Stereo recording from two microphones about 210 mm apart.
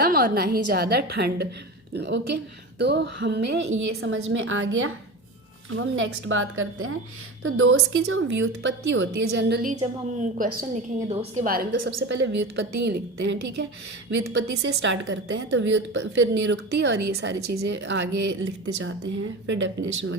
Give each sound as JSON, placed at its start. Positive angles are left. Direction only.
{"t": 0.0, "sound": "a woman's voice", "side_deg": -45}
{"t": 11.1, "sound": "a woman's voice", "side_deg": -30}
{"t": 11.4, "sound": "a woman's voice", "side_deg": -45}
{"t": 11.8, "sound": "a woman's voice", "side_deg": -60}
{"t": 19.5, "sound": "a woman's voice", "side_deg": -60}